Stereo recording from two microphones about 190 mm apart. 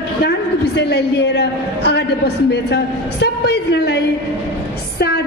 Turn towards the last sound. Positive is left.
turn(degrees=60)  # may be behind; listen again after turning